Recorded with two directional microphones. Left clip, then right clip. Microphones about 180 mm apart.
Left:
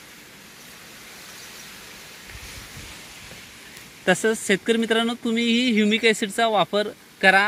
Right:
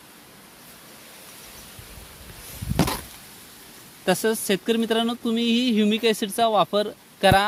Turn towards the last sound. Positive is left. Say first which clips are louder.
# left 1 dB
turn(degrees=-15)  # may be behind; listen again after turning